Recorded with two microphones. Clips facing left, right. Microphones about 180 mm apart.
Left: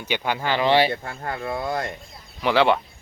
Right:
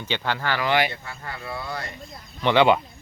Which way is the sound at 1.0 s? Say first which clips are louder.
Left 6 dB; 50° left (ahead or behind).